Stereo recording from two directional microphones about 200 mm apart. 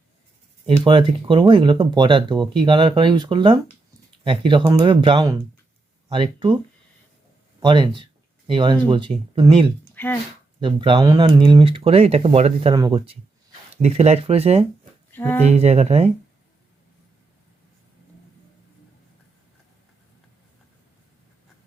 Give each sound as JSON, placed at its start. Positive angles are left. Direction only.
{"t": 0.9, "sound": "speech", "side_deg": -25}
{"t": 7.6, "sound": "speech", "side_deg": -25}
{"t": 9.9, "sound": "a sound", "side_deg": 10}
{"t": 10.6, "sound": "speech", "side_deg": -25}
{"t": 15.1, "sound": "speech", "side_deg": 10}
{"t": 15.4, "sound": "speech", "side_deg": -35}